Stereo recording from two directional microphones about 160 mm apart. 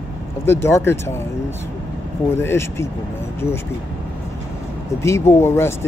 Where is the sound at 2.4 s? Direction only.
15° left (ahead or behind).